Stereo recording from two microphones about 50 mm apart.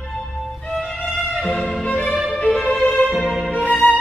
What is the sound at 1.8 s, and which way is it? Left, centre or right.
Music, left.